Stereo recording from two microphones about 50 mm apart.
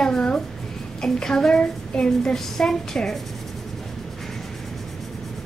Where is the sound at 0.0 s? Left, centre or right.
Centre.